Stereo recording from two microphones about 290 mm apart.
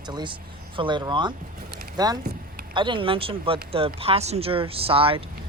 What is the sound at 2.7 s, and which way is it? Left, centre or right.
Speech, centre.